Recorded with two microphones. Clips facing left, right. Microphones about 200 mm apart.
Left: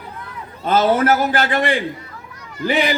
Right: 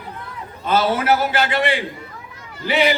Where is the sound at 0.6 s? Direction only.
45° left (ahead or behind).